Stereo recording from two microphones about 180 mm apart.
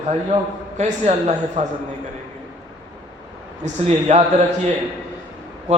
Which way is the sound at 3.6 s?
40° right (ahead or behind).